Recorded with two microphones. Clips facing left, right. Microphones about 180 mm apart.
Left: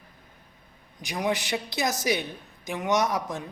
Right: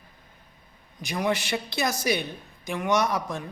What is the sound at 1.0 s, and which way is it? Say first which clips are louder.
A man's voice: right 1 dB; 15° left (ahead or behind).